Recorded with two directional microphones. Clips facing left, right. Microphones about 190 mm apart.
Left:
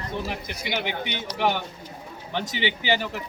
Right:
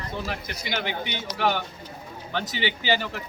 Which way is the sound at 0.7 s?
15° left (ahead or behind).